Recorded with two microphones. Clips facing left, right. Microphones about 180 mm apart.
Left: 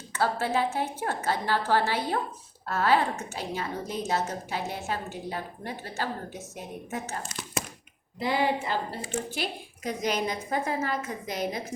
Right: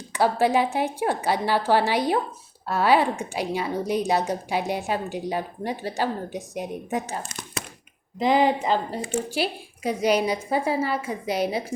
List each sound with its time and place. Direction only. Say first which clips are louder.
0.1 s a woman's voice: right 6 dB; 15° right (ahead or behind)
8.2 s a woman's voice: right 6 dB; 20° right (ahead or behind)